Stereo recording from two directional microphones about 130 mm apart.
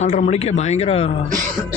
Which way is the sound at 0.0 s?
60° left (ahead or behind).